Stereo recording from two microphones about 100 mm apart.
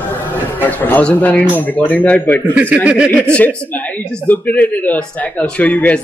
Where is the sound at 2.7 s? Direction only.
10° right (ahead or behind).